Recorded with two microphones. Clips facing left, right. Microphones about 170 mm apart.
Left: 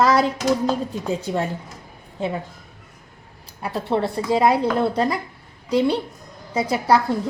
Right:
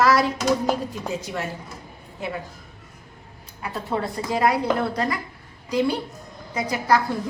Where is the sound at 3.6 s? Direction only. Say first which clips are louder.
Left 5 dB; 30° left (ahead or behind).